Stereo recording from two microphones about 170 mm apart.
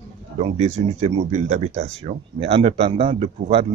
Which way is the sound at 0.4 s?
40° right (ahead or behind).